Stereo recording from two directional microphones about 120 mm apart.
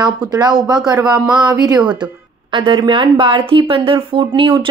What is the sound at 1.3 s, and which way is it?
Speech, 35° right (ahead or behind).